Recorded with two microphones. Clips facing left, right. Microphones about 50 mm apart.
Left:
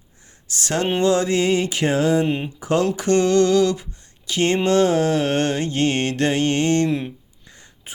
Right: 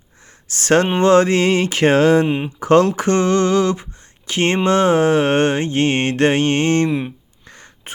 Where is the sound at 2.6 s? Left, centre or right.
Right.